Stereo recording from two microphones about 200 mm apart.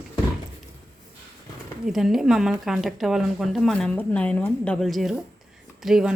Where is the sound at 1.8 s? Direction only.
Centre (ahead or behind).